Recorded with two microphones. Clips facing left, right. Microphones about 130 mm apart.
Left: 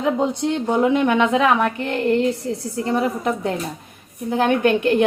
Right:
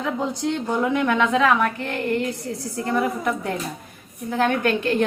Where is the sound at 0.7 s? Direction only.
20° left (ahead or behind).